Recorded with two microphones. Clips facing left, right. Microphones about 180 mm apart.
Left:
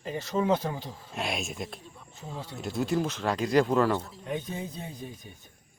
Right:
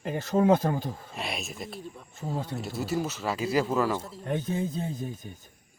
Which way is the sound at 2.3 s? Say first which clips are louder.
Right 6 dB; 50° right (ahead or behind).